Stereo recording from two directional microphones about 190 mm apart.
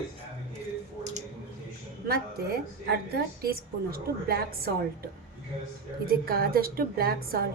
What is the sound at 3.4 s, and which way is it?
A woman's voice, 50° right (ahead or behind).